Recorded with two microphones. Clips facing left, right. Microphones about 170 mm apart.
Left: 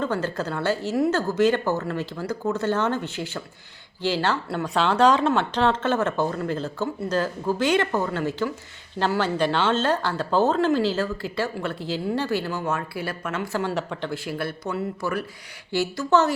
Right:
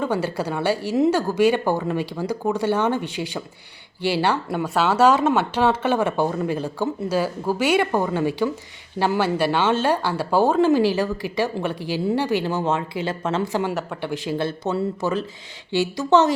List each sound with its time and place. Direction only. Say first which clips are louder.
0.0 s speech: right 2 dB; 10° right (ahead or behind)
13.7 s speech: right 1 dB; 5° right (ahead or behind)
14.1 s speech: right 4 dB; 20° right (ahead or behind)